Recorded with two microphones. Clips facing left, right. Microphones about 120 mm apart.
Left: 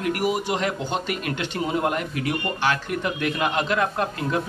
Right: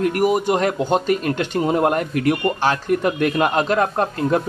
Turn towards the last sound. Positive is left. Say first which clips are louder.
# right 6 dB
turn(degrees=-40)  # may be behind; listen again after turning